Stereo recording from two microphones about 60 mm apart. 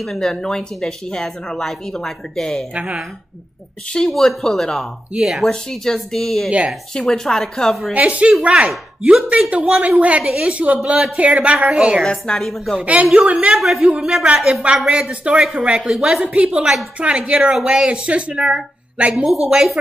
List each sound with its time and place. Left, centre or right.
0.0 s speech: centre
2.7 s speech: centre
3.9 s speech: centre
5.1 s a woman's voice: centre
5.5 s speech: centre
7.9 s speech: right
12.0 s a woman's voice: centre
12.8 s speech: right
13.6 s a woman's voice: centre
13.8 s a woman's voice: centre
17.3 s a woman's voice: centre